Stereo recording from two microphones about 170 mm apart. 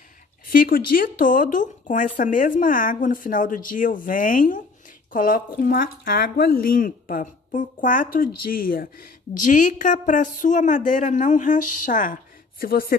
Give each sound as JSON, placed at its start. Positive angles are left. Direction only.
{"t": 0.5, "sound": "speech", "side_deg": 55}